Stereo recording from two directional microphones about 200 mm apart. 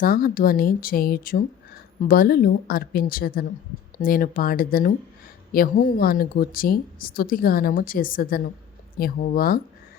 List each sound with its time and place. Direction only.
0.0 s speech: 45° left (ahead or behind)